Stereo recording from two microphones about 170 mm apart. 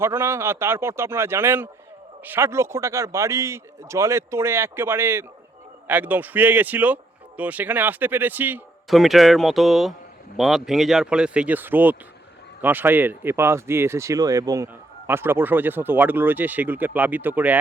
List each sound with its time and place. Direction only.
0.0 s speech: 15° right (ahead or behind)
8.9 s speech: centre (ahead or behind)